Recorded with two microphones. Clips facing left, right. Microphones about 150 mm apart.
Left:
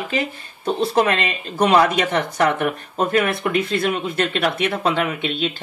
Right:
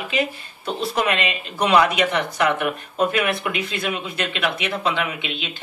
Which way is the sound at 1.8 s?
35° left (ahead or behind).